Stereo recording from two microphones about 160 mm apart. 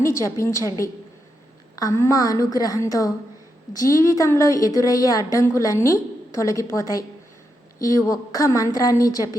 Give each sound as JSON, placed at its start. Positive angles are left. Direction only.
{"t": 0.0, "sound": "a woman's voice", "side_deg": 20}